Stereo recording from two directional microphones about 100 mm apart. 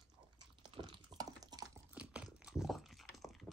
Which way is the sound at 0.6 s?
55° right (ahead or behind).